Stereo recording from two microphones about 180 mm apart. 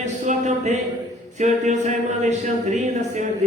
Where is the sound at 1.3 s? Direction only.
40° right (ahead or behind).